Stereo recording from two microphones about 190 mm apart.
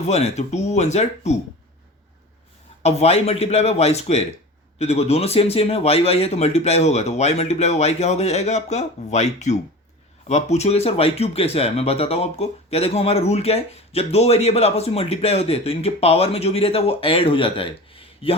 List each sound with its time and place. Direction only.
0.1 s speech: 35° left (ahead or behind)
2.8 s speech: 35° left (ahead or behind)